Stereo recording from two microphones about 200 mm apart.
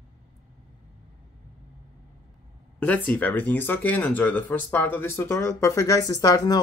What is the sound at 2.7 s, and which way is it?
Speech, 5° left (ahead or behind).